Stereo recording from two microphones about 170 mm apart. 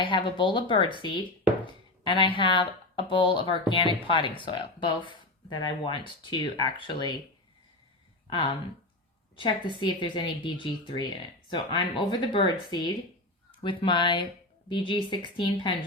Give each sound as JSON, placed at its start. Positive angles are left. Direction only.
{"t": 0.0, "sound": "a woman's voice", "side_deg": 30}
{"t": 9.3, "sound": "a woman's voice", "side_deg": 30}